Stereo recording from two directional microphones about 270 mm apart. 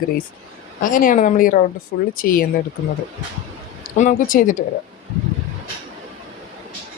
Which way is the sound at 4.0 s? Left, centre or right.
Left.